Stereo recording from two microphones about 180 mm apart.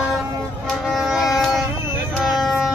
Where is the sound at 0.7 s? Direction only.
Centre (ahead or behind).